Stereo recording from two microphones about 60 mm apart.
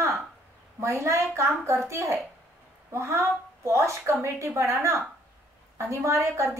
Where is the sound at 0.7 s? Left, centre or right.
Right.